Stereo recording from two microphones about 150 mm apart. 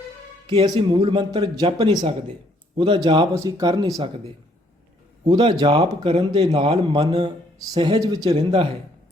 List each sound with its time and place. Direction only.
0.4 s a man's voice: 35° right (ahead or behind)
5.3 s a man's voice: 30° right (ahead or behind)